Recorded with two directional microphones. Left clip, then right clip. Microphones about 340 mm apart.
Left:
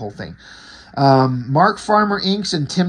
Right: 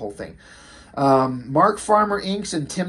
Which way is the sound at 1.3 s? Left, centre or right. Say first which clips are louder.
Left 2 dB; left.